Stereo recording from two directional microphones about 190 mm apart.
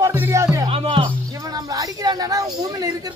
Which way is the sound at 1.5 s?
20° right (ahead or behind).